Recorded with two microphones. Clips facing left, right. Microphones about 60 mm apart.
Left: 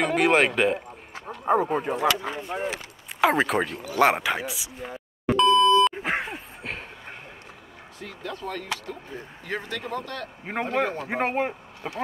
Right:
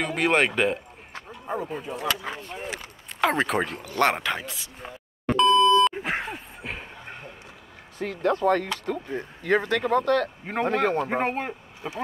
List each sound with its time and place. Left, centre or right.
0.0 s speech: centre
1.4 s speech: left
2.5 s speech: left
3.2 s speech: centre
5.2 s beep: centre
8.0 s speech: right
11.1 s speech: centre